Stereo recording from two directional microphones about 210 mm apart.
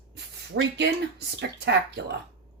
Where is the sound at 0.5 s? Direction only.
60° right (ahead or behind).